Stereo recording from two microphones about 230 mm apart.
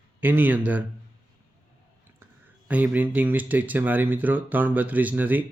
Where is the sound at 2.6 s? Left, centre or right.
Centre.